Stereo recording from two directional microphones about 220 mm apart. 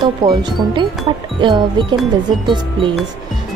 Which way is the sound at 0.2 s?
20° right (ahead or behind).